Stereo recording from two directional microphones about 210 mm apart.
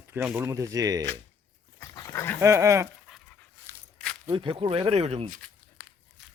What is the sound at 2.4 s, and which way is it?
Speech, 15° right (ahead or behind).